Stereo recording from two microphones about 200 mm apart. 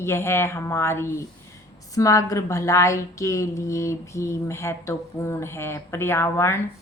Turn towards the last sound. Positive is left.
turn(degrees=15)  # may be behind; listen again after turning